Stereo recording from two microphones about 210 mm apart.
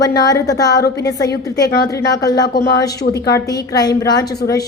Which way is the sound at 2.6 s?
50° left (ahead or behind).